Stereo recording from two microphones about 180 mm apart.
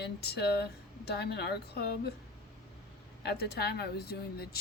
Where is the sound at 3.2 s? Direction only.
60° left (ahead or behind).